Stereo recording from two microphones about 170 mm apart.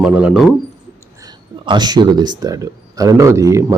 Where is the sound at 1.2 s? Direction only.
25° right (ahead or behind).